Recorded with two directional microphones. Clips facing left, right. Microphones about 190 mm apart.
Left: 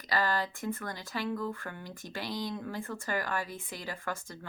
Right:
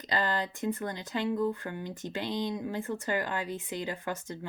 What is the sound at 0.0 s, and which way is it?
Speech, 20° right (ahead or behind).